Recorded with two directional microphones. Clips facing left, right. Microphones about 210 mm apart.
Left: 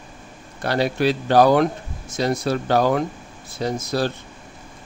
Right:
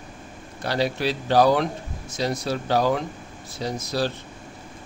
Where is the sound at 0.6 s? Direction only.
55° left (ahead or behind).